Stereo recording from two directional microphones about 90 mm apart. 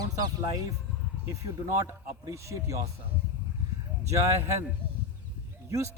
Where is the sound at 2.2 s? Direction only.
35° right (ahead or behind).